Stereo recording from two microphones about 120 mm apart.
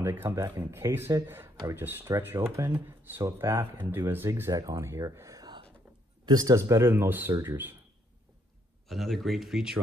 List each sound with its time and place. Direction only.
0.0 s speech: 15° right (ahead or behind)
8.8 s speech: centre (ahead or behind)